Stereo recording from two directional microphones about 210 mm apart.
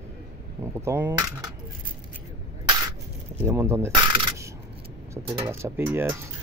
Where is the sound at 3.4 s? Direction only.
15° right (ahead or behind).